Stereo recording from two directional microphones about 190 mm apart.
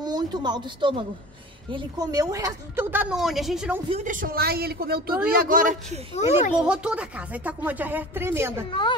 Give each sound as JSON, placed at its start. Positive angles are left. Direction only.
{"t": 0.0, "sound": "a woman's voice", "side_deg": -20}
{"t": 3.9, "sound": "a woman's voice", "side_deg": -45}
{"t": 6.1, "sound": "speech", "side_deg": 35}
{"t": 6.5, "sound": "a woman's voice", "side_deg": -5}